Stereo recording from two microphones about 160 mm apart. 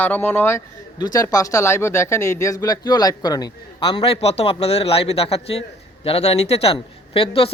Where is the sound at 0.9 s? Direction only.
25° left (ahead or behind).